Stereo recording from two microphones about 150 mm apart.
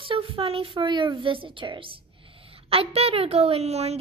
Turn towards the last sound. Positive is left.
turn(degrees=-45)  # may be behind; listen again after turning